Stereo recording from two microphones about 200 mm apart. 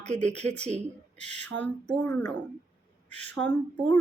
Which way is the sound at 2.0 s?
10° left (ahead or behind).